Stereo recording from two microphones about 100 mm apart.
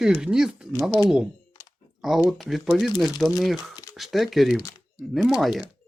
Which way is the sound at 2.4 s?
Centre (ahead or behind).